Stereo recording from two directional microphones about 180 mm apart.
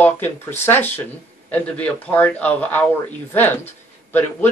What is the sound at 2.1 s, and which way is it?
Speech, 10° left (ahead or behind).